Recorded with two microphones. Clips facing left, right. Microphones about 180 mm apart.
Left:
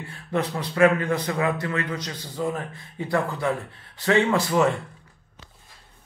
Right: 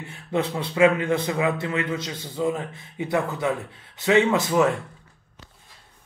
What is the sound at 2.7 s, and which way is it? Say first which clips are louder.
Speech: right 1 dB; 20° right (ahead or behind).